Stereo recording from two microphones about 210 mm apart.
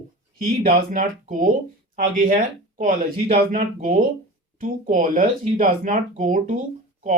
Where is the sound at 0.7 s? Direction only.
40° right (ahead or behind).